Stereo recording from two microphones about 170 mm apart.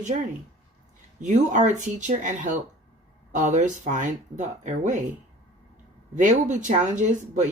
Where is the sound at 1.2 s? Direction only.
45° right (ahead or behind).